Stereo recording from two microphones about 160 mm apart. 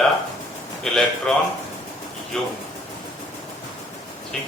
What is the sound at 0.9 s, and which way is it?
A man's voice, 5° left (ahead or behind).